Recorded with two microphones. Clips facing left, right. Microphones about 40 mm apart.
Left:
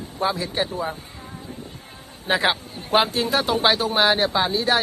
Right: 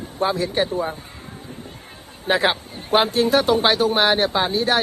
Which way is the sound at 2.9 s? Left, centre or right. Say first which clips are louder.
Right 3 dB; right.